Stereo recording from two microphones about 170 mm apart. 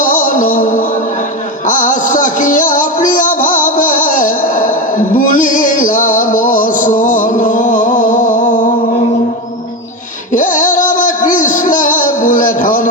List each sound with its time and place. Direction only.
0.0 s music: 50° left (ahead or behind)
10.3 s music: 50° left (ahead or behind)